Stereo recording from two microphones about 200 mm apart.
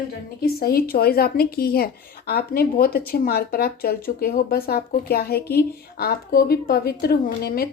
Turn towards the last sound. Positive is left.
turn(degrees=50)  # may be behind; listen again after turning